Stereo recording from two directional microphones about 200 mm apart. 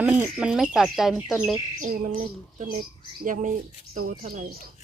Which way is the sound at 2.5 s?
45° right (ahead or behind).